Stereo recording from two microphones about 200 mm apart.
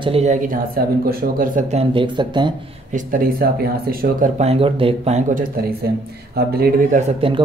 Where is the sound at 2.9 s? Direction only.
45° right (ahead or behind).